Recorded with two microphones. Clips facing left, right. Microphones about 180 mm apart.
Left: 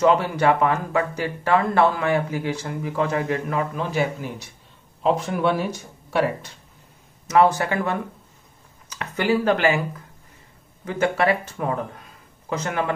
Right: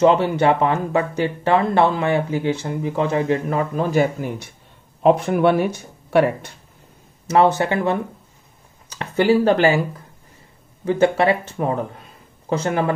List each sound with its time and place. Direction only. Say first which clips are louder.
0.0 s speech: right 3 dB; 25° right (ahead or behind)
3.7 s a man's voice: right 6 dB; 45° right (ahead or behind)
7.2 s speech: right 2 dB; 25° right (ahead or behind)
10.9 s speech: right 4 dB; 25° right (ahead or behind)